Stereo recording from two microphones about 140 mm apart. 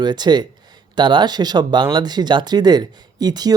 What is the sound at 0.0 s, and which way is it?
Speech, 30° right (ahead or behind).